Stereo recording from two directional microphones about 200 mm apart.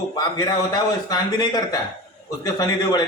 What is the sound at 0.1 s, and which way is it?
A man's voice, 20° left (ahead or behind).